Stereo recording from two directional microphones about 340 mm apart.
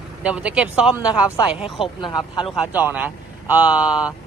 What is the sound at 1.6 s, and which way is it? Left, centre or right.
Speech, centre.